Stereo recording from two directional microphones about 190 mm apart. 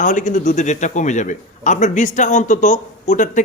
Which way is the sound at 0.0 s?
40° left (ahead or behind).